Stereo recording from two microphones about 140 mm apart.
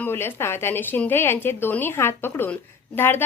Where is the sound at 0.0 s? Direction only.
15° left (ahead or behind).